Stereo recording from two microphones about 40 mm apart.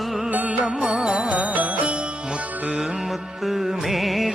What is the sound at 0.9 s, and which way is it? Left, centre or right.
Music, centre.